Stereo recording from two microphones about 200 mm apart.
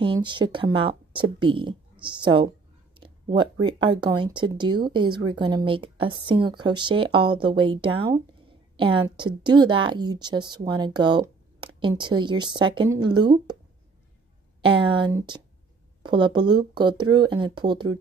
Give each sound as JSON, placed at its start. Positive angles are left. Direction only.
{"t": 0.0, "sound": "a woman's voice", "side_deg": -25}
{"t": 3.0, "sound": "a sound", "side_deg": -25}
{"t": 3.6, "sound": "a woman's voice", "side_deg": -25}
{"t": 14.6, "sound": "speech", "side_deg": -25}